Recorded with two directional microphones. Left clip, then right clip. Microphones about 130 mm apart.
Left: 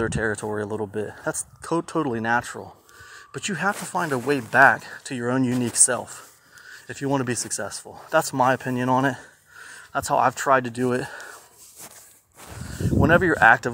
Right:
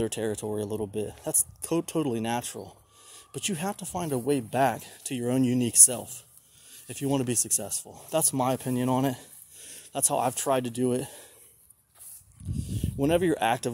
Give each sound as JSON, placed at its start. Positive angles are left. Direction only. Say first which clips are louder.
{"t": 0.0, "sound": "speech", "louder": "left 5 dB", "side_deg": -20}
{"t": 13.3, "sound": "speech", "louder": "left 10 dB", "side_deg": -20}